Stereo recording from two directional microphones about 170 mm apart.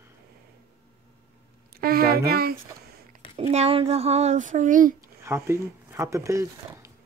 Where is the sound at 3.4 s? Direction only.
35° right (ahead or behind).